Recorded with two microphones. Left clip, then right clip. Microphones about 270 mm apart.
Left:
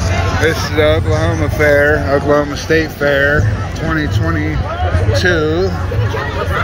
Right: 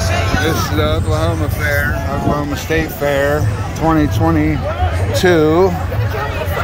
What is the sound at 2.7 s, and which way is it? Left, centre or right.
Speech, centre.